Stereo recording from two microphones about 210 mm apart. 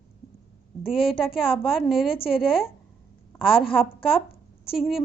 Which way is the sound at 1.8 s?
Centre (ahead or behind).